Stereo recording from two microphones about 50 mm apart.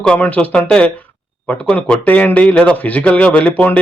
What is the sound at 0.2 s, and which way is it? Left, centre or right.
A man's voice, left.